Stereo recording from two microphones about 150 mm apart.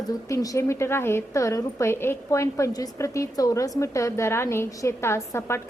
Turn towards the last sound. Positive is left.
turn(degrees=15)  # may be behind; listen again after turning